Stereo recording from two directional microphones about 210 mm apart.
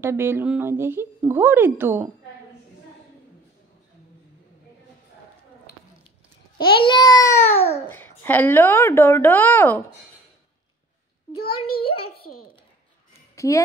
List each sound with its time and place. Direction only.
0.0 s speech: 10° right (ahead or behind)
6.6 s a child's voice: 25° left (ahead or behind)
11.8 s a child's voice: 25° left (ahead or behind)
13.4 s speech: 15° left (ahead or behind)